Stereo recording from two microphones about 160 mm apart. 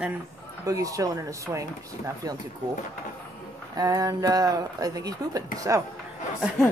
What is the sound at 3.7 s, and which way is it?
Speech, 20° right (ahead or behind).